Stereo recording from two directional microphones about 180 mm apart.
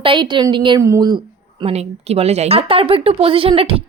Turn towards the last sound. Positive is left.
turn(degrees=-30)  # may be behind; listen again after turning